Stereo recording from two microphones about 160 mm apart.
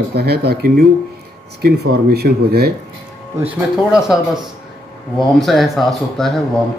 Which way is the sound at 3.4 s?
5° right (ahead or behind).